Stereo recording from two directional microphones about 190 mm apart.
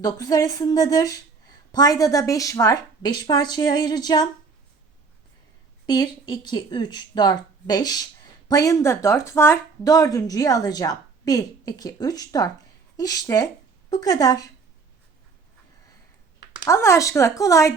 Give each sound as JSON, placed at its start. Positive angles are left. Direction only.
{"t": 0.0, "sound": "a woman's voice", "side_deg": 20}
{"t": 5.8, "sound": "a woman's voice", "side_deg": 20}
{"t": 16.6, "sound": "speech", "side_deg": 15}